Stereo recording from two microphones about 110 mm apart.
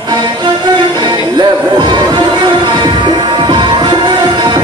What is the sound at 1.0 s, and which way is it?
Music, 40° right (ahead or behind).